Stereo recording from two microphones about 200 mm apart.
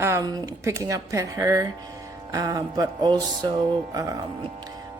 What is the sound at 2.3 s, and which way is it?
Music, 20° right (ahead or behind).